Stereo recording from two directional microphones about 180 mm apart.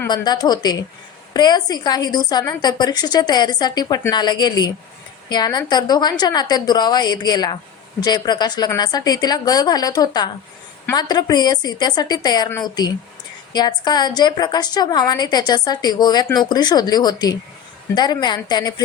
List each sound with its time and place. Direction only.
0.1 s a woman's voice: 25° left (ahead or behind)